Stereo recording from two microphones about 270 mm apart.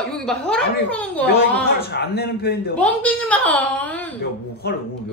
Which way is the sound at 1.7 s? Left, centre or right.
Left.